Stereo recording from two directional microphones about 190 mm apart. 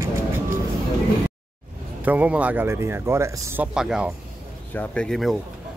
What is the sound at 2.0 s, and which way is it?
A man's voice, 10° right (ahead or behind).